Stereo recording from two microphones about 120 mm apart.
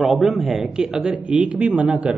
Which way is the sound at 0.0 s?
Centre (ahead or behind).